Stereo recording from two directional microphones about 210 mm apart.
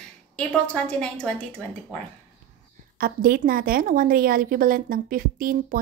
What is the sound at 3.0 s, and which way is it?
A woman's voice, 45° right (ahead or behind).